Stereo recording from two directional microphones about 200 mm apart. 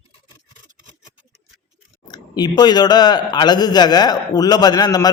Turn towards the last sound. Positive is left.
turn(degrees=20)  # may be behind; listen again after turning